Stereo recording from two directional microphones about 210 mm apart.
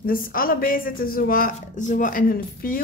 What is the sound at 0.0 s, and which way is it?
Speech, 40° left (ahead or behind).